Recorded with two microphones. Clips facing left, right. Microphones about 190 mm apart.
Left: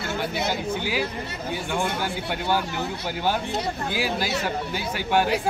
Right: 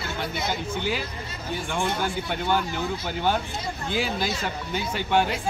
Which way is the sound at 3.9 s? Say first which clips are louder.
Right 1 dB; 5° left (ahead or behind).